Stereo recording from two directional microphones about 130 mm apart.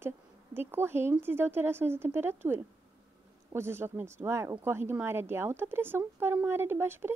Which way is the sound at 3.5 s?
20° right (ahead or behind).